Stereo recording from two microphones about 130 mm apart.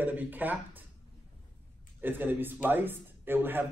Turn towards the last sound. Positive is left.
turn(degrees=-15)  # may be behind; listen again after turning